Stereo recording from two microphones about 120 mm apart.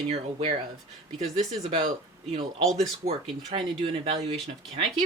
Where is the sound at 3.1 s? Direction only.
50° right (ahead or behind).